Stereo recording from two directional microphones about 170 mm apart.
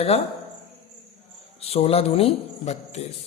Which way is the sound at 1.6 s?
35° left (ahead or behind).